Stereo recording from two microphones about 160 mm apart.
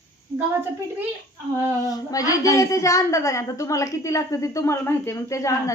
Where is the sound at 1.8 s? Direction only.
20° left (ahead or behind).